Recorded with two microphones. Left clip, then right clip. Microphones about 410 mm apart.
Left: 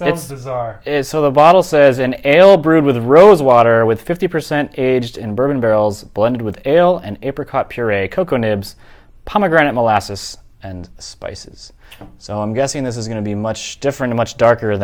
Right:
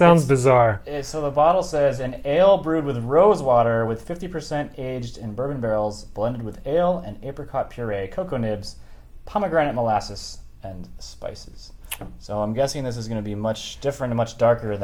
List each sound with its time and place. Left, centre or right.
0.4 s speech: right
0.9 s speech: left